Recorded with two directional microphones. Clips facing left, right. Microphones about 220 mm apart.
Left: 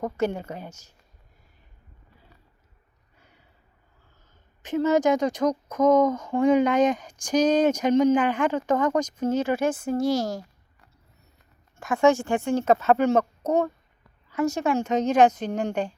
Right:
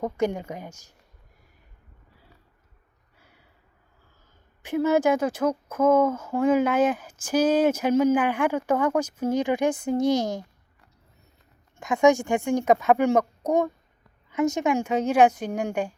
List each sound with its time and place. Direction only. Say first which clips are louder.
0.2 s a woman's voice: even; 10° right (ahead or behind)
4.6 s a woman's voice: even; 10° right (ahead or behind)
11.8 s a woman's voice: right 1 dB; 15° right (ahead or behind)